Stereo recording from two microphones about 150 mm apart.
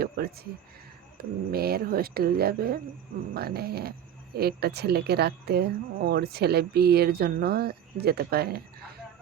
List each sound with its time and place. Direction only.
0.0 s speech: 90° right